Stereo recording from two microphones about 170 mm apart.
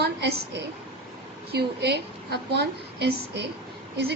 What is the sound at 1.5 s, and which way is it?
A woman's voice, 75° right (ahead or behind).